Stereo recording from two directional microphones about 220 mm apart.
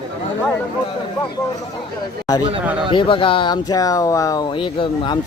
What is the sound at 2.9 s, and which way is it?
Speech, 25° left (ahead or behind).